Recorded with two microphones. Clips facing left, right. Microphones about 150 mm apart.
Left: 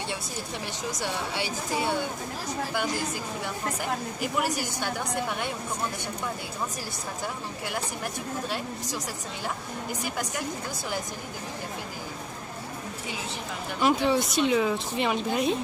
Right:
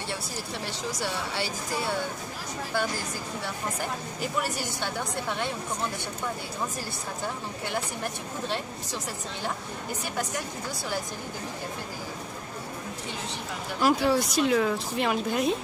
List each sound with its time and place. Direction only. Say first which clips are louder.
1.0 s a woman's voice: left 1 dB; 15° left (ahead or behind)
4.2 s a woman's voice: even; 10° left (ahead or behind)
13.7 s speech: even; centre (ahead or behind)